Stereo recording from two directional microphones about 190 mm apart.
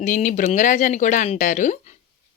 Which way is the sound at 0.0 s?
45° left (ahead or behind).